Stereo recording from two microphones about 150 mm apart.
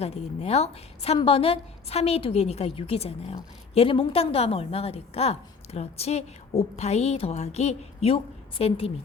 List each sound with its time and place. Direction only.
0.0 s a woman's voice: 45° left (ahead or behind)